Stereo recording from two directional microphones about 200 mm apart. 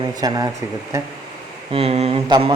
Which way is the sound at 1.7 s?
30° right (ahead or behind).